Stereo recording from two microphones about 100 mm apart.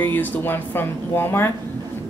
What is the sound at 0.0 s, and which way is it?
A woman's voice, 20° left (ahead or behind).